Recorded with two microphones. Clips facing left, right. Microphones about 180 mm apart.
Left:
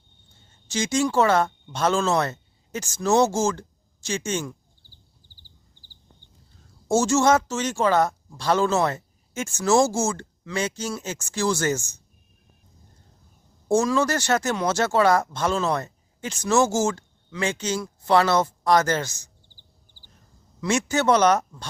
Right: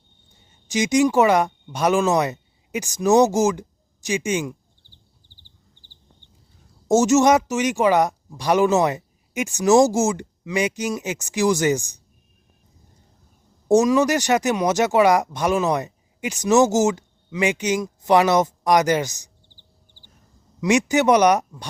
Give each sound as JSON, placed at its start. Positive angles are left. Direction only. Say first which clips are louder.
{"t": 0.3, "sound": "speech", "louder": "right 5 dB", "side_deg": -15}
{"t": 6.8, "sound": "speech", "louder": "right 4 dB", "side_deg": -20}
{"t": 13.7, "sound": "speech", "louder": "right 5 dB", "side_deg": -20}
{"t": 20.6, "sound": "speech", "louder": "right 5 dB", "side_deg": -15}